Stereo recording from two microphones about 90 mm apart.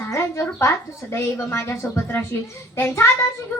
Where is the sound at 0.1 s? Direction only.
30° left (ahead or behind).